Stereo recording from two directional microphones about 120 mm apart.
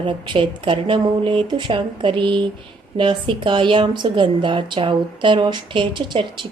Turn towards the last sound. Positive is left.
turn(degrees=-40)  # may be behind; listen again after turning